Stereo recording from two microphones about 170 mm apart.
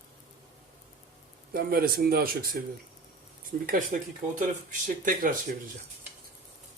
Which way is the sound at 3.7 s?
50° right (ahead or behind).